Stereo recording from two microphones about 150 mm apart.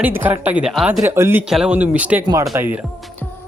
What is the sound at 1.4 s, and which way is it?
A man's voice, 5° right (ahead or behind).